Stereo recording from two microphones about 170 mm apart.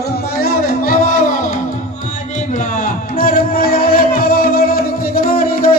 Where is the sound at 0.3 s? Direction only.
55° left (ahead or behind).